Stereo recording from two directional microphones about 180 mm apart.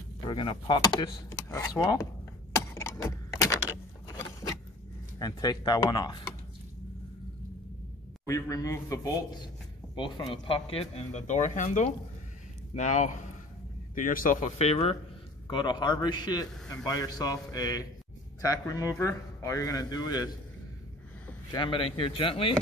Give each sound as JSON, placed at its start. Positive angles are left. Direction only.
{"t": 0.3, "sound": "speech", "side_deg": 30}
{"t": 2.5, "sound": "a sound", "side_deg": 15}
{"t": 5.2, "sound": "speech", "side_deg": 20}
{"t": 8.3, "sound": "speech", "side_deg": 20}
{"t": 15.4, "sound": "speech", "side_deg": 25}
{"t": 21.5, "sound": "speech", "side_deg": 25}